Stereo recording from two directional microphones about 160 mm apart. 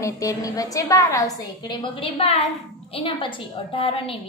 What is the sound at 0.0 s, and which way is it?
A woman's voice, 20° left (ahead or behind).